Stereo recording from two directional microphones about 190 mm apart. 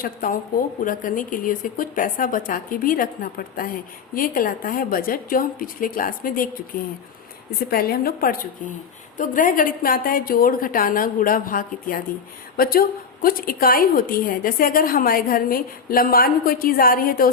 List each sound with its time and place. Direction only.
0.0 s a woman's voice: 50° left (ahead or behind)
7.7 s a woman's voice: 50° left (ahead or behind)